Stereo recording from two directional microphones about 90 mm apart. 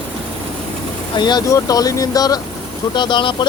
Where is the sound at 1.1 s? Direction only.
55° left (ahead or behind).